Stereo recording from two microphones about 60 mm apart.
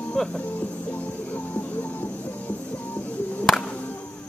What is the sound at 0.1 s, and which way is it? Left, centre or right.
Music, centre.